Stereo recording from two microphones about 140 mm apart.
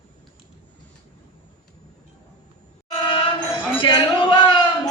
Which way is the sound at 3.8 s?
35° left (ahead or behind).